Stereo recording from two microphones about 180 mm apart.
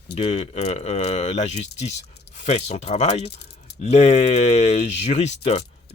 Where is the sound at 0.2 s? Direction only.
35° left (ahead or behind).